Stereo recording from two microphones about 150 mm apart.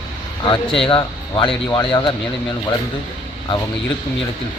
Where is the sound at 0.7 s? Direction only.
35° left (ahead or behind).